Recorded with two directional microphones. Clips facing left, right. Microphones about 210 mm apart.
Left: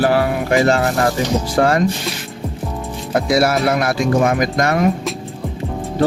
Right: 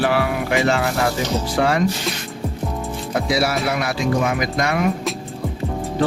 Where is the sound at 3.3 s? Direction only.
50° left (ahead or behind).